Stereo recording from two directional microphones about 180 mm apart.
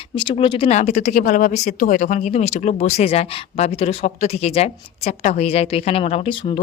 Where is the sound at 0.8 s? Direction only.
40° left (ahead or behind).